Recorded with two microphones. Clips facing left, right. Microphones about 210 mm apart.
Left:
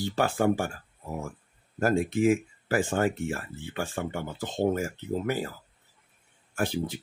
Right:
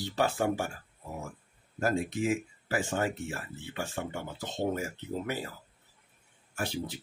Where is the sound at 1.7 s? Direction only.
50° left (ahead or behind).